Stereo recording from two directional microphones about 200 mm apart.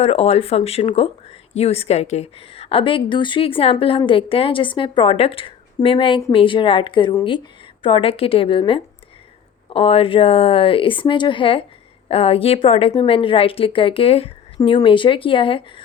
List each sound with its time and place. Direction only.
0.0 s speech: 30° left (ahead or behind)